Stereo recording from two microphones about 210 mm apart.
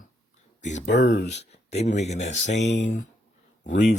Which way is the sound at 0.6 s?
35° left (ahead or behind).